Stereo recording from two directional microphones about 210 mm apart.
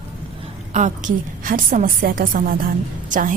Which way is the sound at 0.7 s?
35° right (ahead or behind).